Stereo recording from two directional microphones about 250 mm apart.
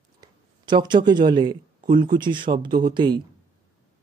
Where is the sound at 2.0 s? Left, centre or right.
Centre.